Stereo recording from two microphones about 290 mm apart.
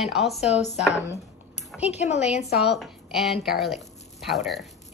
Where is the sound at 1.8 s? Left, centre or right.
Left.